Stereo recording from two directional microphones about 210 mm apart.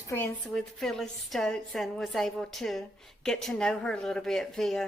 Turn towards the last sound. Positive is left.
turn(degrees=0)  # may be behind; listen again after turning